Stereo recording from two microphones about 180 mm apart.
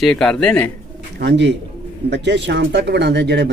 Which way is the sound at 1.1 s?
70° right (ahead or behind).